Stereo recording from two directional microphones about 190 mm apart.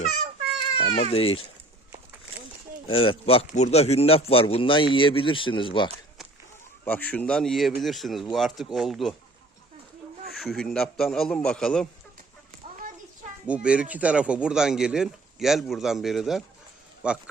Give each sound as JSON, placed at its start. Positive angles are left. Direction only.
{"t": 0.8, "sound": "speech", "side_deg": 30}
{"t": 2.8, "sound": "a man's voice", "side_deg": 30}
{"t": 6.8, "sound": "speech", "side_deg": 10}
{"t": 10.4, "sound": "speech", "side_deg": 0}
{"t": 13.5, "sound": "speech", "side_deg": -5}